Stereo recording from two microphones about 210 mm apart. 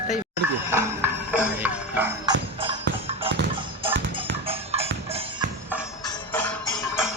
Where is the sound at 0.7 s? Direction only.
10° right (ahead or behind).